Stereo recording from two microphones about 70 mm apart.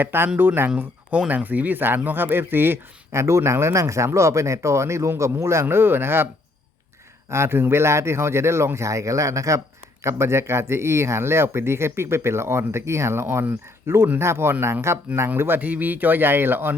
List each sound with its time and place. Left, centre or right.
0.0 s speech: right
1.1 s speech: centre
7.3 s speech: right